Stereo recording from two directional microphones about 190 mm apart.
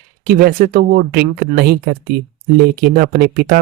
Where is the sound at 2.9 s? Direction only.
55° right (ahead or behind).